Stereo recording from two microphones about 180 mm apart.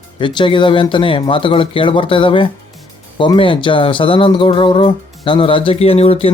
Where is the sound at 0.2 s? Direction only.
25° left (ahead or behind).